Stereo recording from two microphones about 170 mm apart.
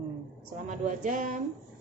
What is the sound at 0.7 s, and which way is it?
Speech, 50° right (ahead or behind).